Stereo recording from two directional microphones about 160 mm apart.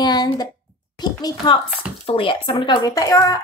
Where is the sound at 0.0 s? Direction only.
25° left (ahead or behind).